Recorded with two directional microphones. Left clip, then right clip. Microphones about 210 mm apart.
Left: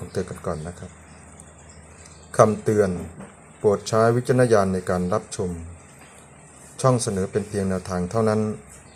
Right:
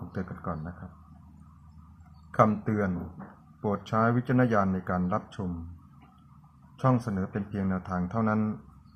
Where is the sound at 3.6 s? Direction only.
35° left (ahead or behind).